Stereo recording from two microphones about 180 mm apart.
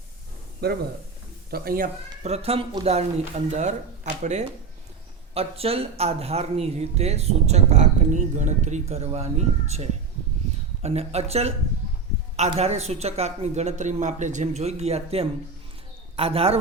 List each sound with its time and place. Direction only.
0.6 s speech: 60° right (ahead or behind)
2.2 s speech: 35° right (ahead or behind)